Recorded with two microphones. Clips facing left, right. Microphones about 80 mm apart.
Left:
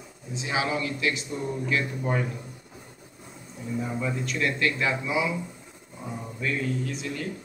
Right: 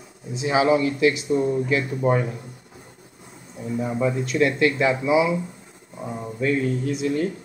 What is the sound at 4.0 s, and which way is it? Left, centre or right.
Speech, centre.